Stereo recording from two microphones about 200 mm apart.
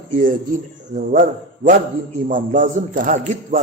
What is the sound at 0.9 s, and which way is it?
A man's voice, 40° right (ahead or behind).